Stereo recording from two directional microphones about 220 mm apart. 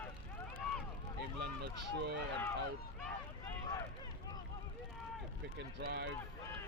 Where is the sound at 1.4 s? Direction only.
50° right (ahead or behind).